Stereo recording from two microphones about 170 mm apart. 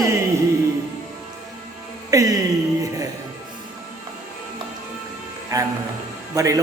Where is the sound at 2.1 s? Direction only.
20° right (ahead or behind).